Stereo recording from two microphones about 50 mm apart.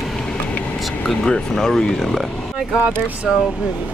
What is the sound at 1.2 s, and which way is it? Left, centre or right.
Speech, centre.